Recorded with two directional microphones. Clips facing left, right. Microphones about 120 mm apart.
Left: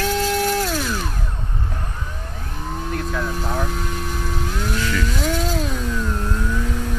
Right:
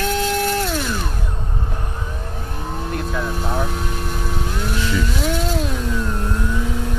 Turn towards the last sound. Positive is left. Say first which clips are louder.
# right 1 dB
turn(degrees=-5)  # may be behind; listen again after turning